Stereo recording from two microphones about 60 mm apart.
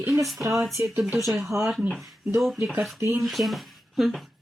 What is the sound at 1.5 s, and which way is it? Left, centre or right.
Speech, right.